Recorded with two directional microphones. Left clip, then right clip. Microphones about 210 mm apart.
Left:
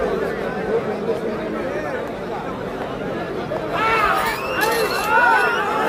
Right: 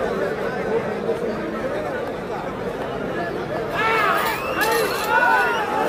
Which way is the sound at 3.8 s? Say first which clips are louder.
Left 2 dB; 5° left (ahead or behind).